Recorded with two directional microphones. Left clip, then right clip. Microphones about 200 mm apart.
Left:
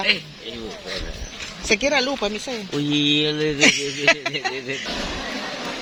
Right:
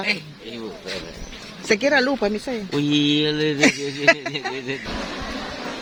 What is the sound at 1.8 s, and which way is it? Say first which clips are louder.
Speech: right 2 dB; 35° right (ahead or behind).